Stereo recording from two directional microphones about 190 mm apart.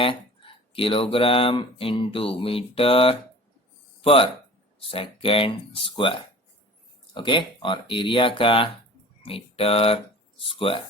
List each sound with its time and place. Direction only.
0.0 s speech: 30° left (ahead or behind)